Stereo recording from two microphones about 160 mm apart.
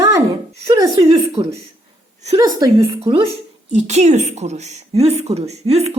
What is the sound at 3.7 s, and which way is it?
A woman's voice, 45° right (ahead or behind).